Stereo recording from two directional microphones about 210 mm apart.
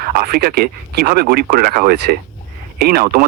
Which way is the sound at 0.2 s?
45° right (ahead or behind).